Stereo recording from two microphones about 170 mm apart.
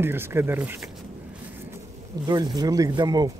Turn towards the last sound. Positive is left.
turn(degrees=-25)  # may be behind; listen again after turning